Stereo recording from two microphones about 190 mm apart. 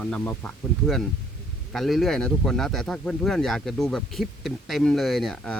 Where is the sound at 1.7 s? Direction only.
Centre (ahead or behind).